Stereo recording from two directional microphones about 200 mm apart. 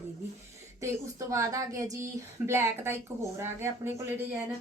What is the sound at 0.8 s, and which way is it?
Speech, 15° right (ahead or behind).